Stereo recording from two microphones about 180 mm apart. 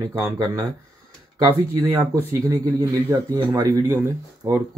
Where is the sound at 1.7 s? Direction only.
15° right (ahead or behind).